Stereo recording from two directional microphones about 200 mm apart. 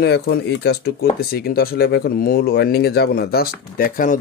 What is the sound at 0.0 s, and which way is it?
A man's voice, 55° left (ahead or behind).